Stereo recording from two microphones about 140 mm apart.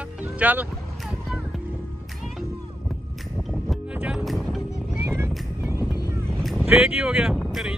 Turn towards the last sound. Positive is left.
turn(degrees=0)  # may be behind; listen again after turning